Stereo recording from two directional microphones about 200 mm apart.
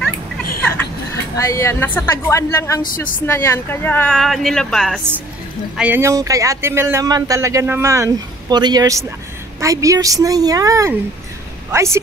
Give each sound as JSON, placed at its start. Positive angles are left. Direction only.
{"t": 0.6, "sound": "a sound", "side_deg": 10}
{"t": 1.3, "sound": "a woman's voice", "side_deg": 15}
{"t": 2.8, "sound": "a woman's voice", "side_deg": 45}
{"t": 3.3, "sound": "speech", "side_deg": 10}